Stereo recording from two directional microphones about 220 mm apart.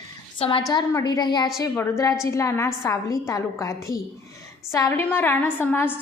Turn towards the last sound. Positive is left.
turn(degrees=10)  # may be behind; listen again after turning